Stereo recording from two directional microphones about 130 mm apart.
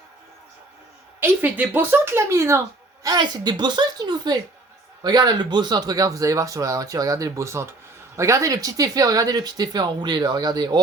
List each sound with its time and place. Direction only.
1.2 s a woman's voice: 15° right (ahead or behind); by 10.8 s 30° right (ahead or behind)